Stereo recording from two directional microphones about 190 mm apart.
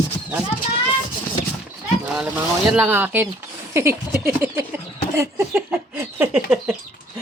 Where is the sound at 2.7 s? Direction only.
10° right (ahead or behind).